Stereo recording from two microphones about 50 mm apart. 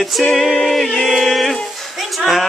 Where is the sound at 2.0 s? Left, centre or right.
Centre.